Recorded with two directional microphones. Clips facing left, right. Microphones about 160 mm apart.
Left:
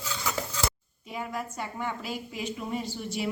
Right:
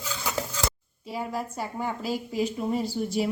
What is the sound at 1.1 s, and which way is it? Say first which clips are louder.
A woman's voice: right 3 dB; 35° right (ahead or behind).